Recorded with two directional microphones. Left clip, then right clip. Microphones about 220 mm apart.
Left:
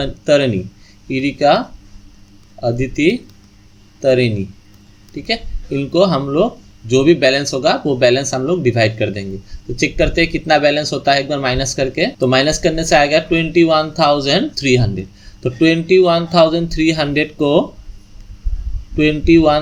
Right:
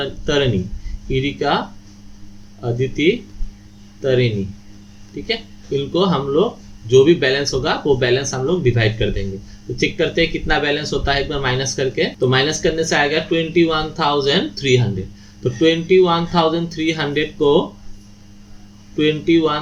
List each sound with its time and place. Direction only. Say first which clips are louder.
0.0 s speech: left 5 dB; 45° left (ahead or behind)
18.9 s speech: left 4 dB; 45° left (ahead or behind)